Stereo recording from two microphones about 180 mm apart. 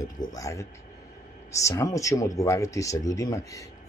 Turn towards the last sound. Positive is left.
turn(degrees=20)  # may be behind; listen again after turning